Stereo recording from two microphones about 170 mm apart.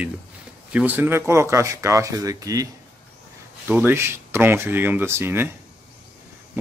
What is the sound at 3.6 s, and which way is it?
Speech, 10° right (ahead or behind).